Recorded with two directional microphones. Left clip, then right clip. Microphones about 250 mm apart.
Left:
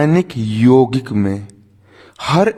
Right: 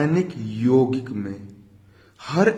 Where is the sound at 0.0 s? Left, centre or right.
Left.